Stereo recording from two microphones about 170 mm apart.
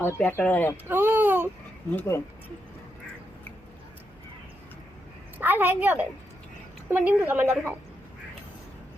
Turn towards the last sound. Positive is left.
turn(degrees=-10)  # may be behind; listen again after turning